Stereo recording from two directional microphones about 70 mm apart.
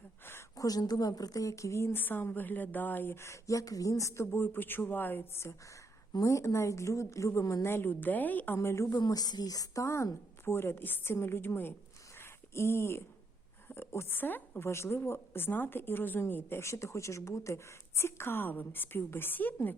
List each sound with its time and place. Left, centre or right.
0.5 s a woman's voice: left
2.0 s speech: left
6.2 s a woman's voice: left
8.5 s a woman's voice: left
9.0 s a woman's voice: left
9.8 s a woman's voice: left
12.1 s a sound: left
13.7 s speech: left
14.7 s speech: left